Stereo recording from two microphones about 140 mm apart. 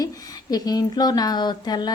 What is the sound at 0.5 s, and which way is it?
A woman's voice, 25° left (ahead or behind).